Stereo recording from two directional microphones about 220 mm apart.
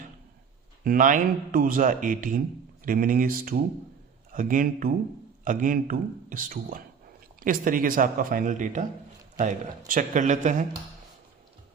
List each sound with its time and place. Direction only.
0.9 s speech: 35° right (ahead or behind)